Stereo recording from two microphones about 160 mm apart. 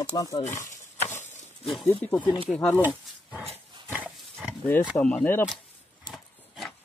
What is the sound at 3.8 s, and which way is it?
Pig, 10° right (ahead or behind).